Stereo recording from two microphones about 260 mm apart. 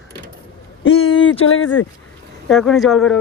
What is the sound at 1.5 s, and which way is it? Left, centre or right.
Speech, left.